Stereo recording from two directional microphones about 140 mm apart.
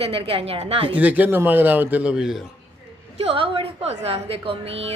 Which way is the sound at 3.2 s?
40° right (ahead or behind).